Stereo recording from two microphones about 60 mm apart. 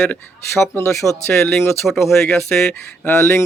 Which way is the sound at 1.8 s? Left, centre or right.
Centre.